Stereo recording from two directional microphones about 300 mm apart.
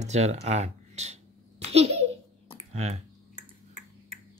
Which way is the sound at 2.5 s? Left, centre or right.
Right.